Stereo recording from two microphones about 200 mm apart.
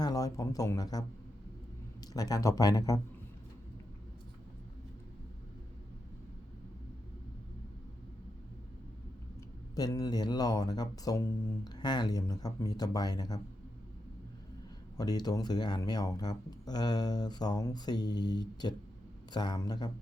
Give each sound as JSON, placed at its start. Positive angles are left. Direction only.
{"t": 0.0, "sound": "speech", "side_deg": 20}
{"t": 2.1, "sound": "speech", "side_deg": 15}
{"t": 9.7, "sound": "speech", "side_deg": 20}
{"t": 14.9, "sound": "speech", "side_deg": 20}